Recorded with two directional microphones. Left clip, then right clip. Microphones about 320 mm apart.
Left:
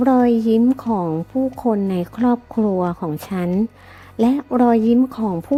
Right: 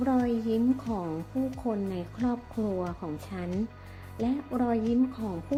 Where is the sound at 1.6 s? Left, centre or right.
Left.